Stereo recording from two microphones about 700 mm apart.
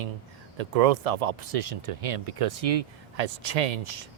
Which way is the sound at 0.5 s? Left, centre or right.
Right.